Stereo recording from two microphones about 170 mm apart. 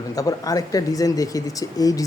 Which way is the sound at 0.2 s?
20° left (ahead or behind).